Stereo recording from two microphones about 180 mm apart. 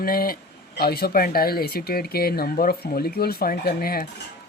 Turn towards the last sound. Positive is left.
turn(degrees=55)  # may be behind; listen again after turning